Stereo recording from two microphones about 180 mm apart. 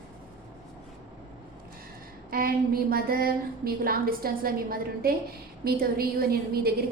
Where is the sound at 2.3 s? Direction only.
55° right (ahead or behind).